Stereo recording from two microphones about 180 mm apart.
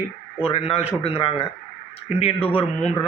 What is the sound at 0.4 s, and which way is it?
A man's voice, 35° left (ahead or behind).